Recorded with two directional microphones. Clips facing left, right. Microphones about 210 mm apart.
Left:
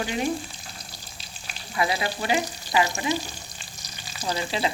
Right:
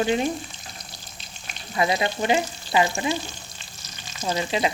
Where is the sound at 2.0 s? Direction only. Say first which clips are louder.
Right 4 dB; 20° right (ahead or behind).